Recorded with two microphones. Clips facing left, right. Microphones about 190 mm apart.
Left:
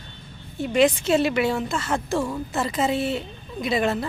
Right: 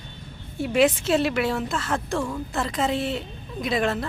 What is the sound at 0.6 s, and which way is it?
A woman's voice, 5° right (ahead or behind).